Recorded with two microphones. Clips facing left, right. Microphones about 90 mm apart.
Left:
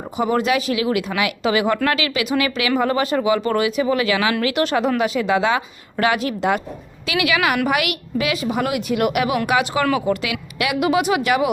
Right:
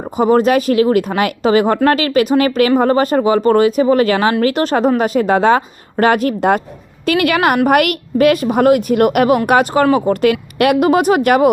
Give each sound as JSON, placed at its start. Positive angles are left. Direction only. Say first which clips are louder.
{"t": 0.2, "sound": "speech", "louder": "right 7 dB", "side_deg": -40}